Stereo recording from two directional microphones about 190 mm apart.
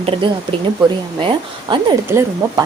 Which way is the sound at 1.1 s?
25° right (ahead or behind).